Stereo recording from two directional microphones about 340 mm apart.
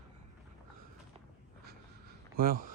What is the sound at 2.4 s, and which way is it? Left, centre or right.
Speech, right.